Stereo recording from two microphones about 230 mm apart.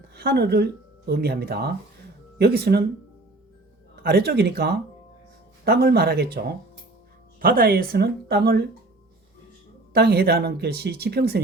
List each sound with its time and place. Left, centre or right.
0.1 s speech: right
4.0 s speech: right
9.9 s speech: right